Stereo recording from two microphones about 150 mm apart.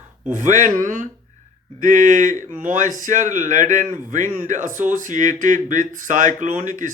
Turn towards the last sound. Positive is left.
turn(degrees=-60)  # may be behind; listen again after turning